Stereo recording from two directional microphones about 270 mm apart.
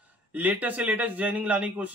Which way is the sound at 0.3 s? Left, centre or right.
Centre.